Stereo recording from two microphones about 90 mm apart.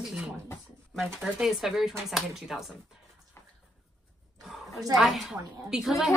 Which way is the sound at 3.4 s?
30° left (ahead or behind).